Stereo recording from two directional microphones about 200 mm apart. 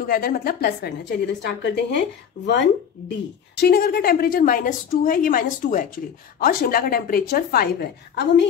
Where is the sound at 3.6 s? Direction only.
50° left (ahead or behind).